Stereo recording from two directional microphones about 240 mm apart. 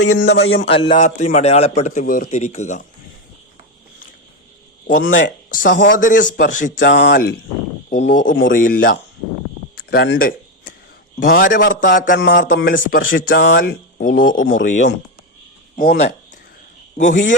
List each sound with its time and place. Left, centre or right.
0.0 s speech: left
0.6 s a sound: left
1.0 s a man's voice: left
5.2 s a man's voice: left
6.9 s a man's voice: left